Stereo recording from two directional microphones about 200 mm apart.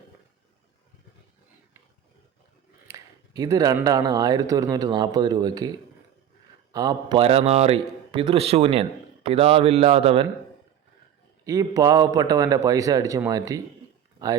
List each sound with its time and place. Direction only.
2.8 s a man's voice: 15° right (ahead or behind)
6.7 s a man's voice: 20° right (ahead or behind)
11.4 s speech: 20° right (ahead or behind)